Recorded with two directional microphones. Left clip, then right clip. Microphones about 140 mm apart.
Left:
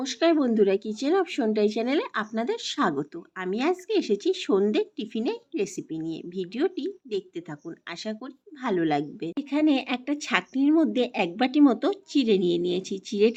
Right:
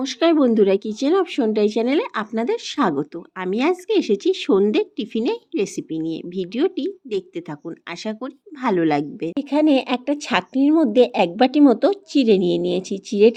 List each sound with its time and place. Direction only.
0.0 s speech: 30° right (ahead or behind)